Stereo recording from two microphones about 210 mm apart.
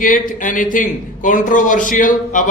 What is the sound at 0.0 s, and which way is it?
Speech, 40° left (ahead or behind).